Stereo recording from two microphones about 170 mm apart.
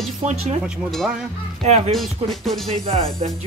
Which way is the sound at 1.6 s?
40° right (ahead or behind).